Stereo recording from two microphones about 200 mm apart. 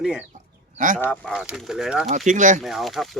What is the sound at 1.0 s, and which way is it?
Speech, 5° right (ahead or behind).